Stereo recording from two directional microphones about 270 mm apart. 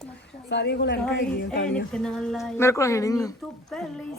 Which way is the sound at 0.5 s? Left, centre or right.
Left.